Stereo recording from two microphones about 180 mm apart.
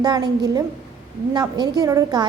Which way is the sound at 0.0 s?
20° right (ahead or behind).